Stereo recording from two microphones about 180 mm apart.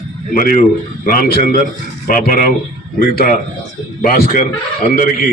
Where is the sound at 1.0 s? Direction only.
50° left (ahead or behind).